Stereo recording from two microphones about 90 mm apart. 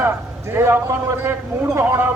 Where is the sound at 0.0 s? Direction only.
25° right (ahead or behind).